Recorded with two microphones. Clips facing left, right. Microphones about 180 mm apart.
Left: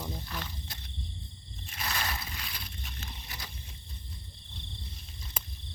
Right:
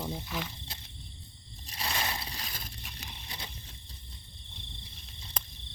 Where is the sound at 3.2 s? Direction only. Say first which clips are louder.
Right 1 dB; 25° right (ahead or behind).